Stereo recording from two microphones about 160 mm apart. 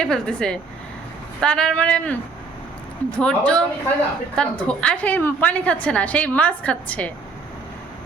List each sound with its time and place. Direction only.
0.0 s a woman's voice: 5° left (ahead or behind)
3.2 s a woman's voice: 5° left (ahead or behind)